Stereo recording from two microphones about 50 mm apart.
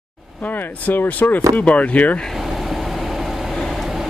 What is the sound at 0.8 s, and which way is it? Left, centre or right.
Speech, left.